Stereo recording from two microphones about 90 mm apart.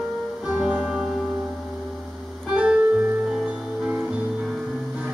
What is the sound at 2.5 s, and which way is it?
Music, 10° right (ahead or behind).